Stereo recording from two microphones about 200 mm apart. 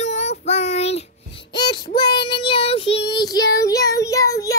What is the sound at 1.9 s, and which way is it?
Child singing, 20° left (ahead or behind).